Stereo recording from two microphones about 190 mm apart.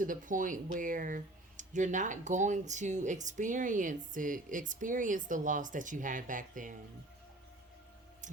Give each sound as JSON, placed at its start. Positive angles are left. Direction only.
{"t": 0.0, "sound": "speech", "side_deg": -45}